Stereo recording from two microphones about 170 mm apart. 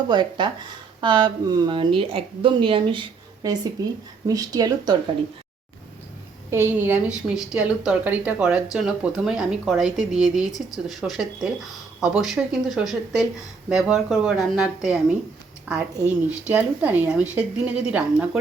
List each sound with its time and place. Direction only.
0.1 s speech: 25° right (ahead or behind)
6.5 s a woman's voice: 15° right (ahead or behind)